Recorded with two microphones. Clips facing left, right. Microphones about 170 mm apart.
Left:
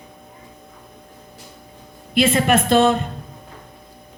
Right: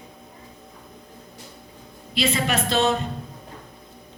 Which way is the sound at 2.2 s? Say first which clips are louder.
Left 7 dB; 55° left (ahead or behind).